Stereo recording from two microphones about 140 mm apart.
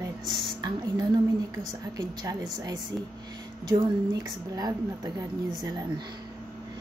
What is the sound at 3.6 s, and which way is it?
A woman's voice, 25° right (ahead or behind).